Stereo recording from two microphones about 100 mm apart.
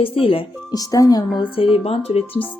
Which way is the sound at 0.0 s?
65° left (ahead or behind).